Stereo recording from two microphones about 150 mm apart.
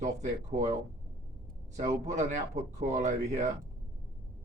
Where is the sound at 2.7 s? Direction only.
50° right (ahead or behind).